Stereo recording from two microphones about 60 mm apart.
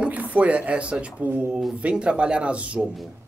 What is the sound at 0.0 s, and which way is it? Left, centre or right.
A woman's voice, right.